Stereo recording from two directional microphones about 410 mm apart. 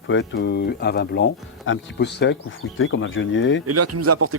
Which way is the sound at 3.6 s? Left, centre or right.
Right.